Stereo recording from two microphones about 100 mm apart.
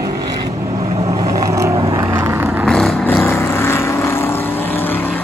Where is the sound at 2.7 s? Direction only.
5° left (ahead or behind).